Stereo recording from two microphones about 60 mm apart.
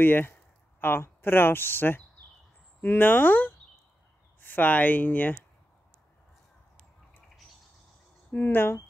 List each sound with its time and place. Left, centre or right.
0.0 s speech: left
8.3 s speech: left